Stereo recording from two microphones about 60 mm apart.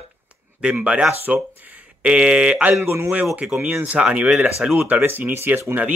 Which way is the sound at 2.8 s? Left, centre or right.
Right.